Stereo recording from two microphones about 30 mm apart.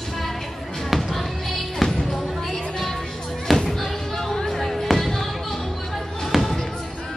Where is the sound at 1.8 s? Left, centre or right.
Centre.